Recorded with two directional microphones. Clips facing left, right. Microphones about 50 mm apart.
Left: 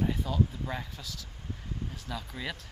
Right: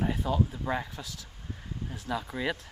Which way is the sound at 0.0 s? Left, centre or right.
Centre.